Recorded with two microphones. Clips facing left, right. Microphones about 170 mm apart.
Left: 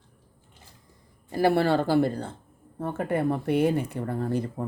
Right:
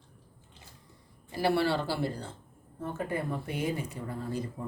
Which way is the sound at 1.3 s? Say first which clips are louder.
Left 5 dB; 50° left (ahead or behind).